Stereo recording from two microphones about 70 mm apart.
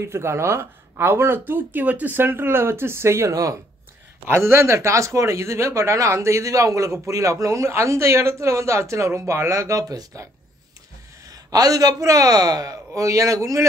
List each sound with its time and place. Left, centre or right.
0.0 s speech: right
11.2 s a man's voice: right